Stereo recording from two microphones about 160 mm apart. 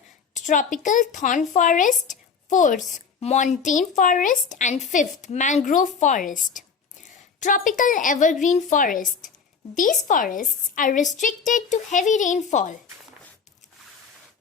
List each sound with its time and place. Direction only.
0.3 s a woman's voice: 50° left (ahead or behind)